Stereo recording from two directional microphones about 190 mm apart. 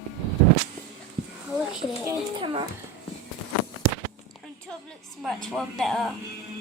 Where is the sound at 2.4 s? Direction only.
30° right (ahead or behind).